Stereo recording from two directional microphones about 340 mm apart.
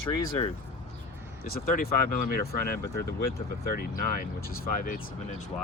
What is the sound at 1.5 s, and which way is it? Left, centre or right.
Speech, left.